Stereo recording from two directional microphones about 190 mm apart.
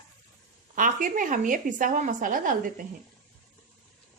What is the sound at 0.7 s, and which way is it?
A woman's voice, 45° right (ahead or behind).